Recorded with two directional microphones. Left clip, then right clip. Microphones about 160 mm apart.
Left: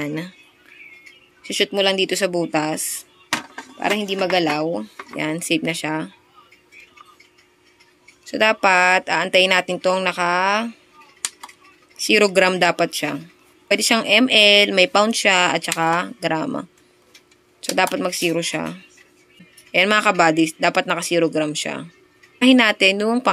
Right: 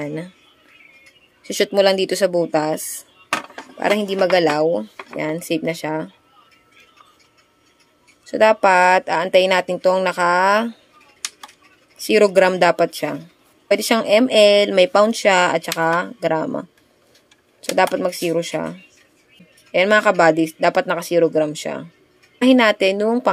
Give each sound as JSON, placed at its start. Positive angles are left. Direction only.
{"t": 0.0, "sound": "speech", "side_deg": -5}
{"t": 1.4, "sound": "speech", "side_deg": -25}
{"t": 3.8, "sound": "speech", "side_deg": -25}
{"t": 8.3, "sound": "speech", "side_deg": -15}
{"t": 12.0, "sound": "speech", "side_deg": -15}